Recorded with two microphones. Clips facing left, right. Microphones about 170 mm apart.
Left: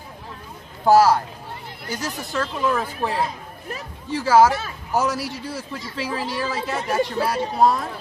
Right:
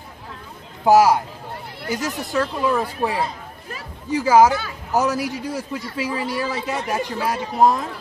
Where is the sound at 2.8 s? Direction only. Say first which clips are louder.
Right 2 dB; 10° right (ahead or behind).